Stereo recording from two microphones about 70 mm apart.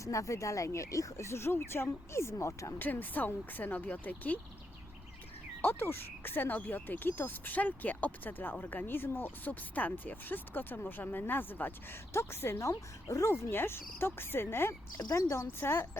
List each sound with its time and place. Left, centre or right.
0.0 s speech: left
2.7 s speech: left
5.6 s speech: left
12.5 s speech: left
13.4 s speech: left